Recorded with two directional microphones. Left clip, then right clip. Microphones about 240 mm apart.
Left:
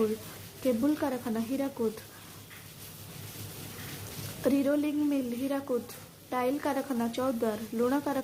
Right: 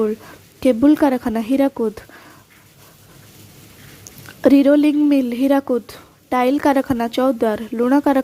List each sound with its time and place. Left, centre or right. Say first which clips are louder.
0.6 s speech: right 15 dB; right
4.4 s speech: right 15 dB; right